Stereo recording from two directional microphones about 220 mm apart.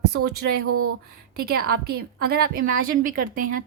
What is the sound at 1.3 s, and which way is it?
A woman's voice, 45° right (ahead or behind).